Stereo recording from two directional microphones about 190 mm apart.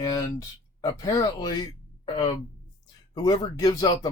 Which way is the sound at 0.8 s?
20° left (ahead or behind).